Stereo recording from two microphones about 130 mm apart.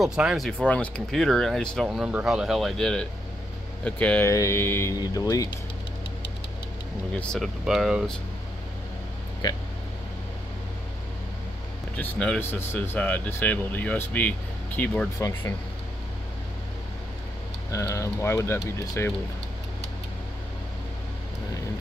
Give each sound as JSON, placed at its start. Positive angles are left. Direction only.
{"t": 0.0, "sound": "speech", "side_deg": -5}
{"t": 0.5, "sound": "speech", "side_deg": 5}
{"t": 4.3, "sound": "speech", "side_deg": 25}
{"t": 4.9, "sound": "speech", "side_deg": 30}
{"t": 7.1, "sound": "speech", "side_deg": 10}
{"t": 12.0, "sound": "speech", "side_deg": 10}
{"t": 15.1, "sound": "speech", "side_deg": 25}
{"t": 17.6, "sound": "speech", "side_deg": 20}